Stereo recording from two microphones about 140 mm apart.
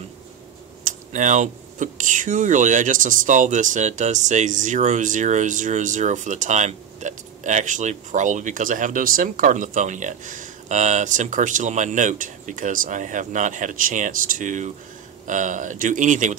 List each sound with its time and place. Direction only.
0.8 s speech: 60° right (ahead or behind)